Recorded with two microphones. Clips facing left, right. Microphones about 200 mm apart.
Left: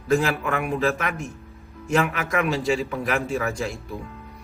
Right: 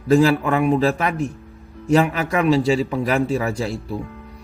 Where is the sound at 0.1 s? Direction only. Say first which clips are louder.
Right 6 dB; 35° right (ahead or behind).